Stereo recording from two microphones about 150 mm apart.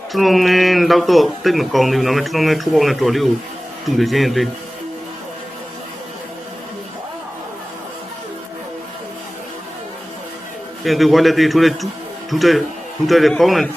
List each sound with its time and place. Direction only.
0.1 s speech: centre (ahead or behind)
10.8 s speech: centre (ahead or behind)